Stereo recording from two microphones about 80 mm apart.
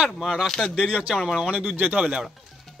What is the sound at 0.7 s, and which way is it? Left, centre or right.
Speech, centre.